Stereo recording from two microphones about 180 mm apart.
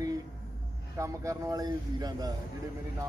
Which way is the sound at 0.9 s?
15° right (ahead or behind).